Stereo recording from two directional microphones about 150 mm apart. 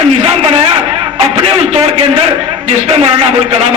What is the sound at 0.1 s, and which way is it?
A man's voice, 40° right (ahead or behind).